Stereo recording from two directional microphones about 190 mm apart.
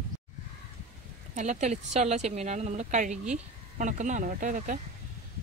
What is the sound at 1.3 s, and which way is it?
A woman's voice, 40° right (ahead or behind).